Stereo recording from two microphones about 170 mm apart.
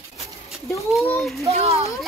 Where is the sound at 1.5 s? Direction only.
35° right (ahead or behind).